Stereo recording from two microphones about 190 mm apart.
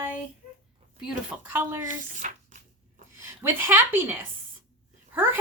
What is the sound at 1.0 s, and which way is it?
Speech, 10° right (ahead or behind).